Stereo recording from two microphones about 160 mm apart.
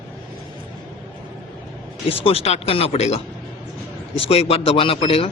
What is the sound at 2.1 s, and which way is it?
Speech, 35° left (ahead or behind).